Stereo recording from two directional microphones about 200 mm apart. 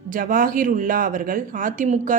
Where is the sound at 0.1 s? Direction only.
45° right (ahead or behind).